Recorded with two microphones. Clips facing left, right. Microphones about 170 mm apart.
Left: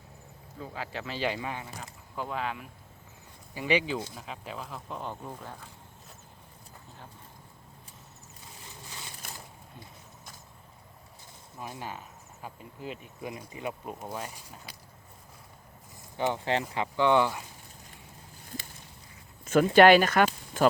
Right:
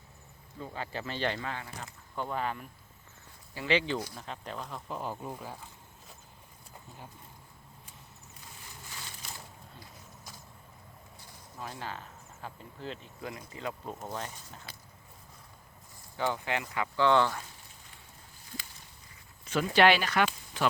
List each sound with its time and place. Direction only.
0.6 s speech: centre (ahead or behind)
2.1 s speech: centre (ahead or behind)
3.5 s speech: 15° left (ahead or behind); by 5.5 s 5° right (ahead or behind)
9.2 s a sound: 55° left (ahead or behind)
11.6 s speech: 15° left (ahead or behind)
16.1 s speech: 20° left (ahead or behind)
19.5 s speech: 50° left (ahead or behind)